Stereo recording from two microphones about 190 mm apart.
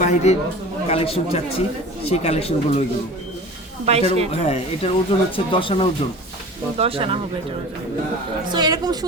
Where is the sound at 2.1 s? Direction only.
35° left (ahead or behind).